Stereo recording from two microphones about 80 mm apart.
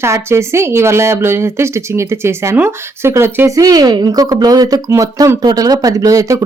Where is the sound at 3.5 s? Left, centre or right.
Right.